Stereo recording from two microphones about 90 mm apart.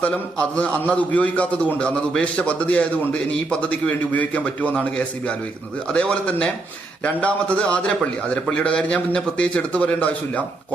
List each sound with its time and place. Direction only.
0.0 s a man's voice: 15° left (ahead or behind)